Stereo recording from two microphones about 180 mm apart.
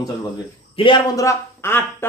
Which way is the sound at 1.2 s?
15° left (ahead or behind).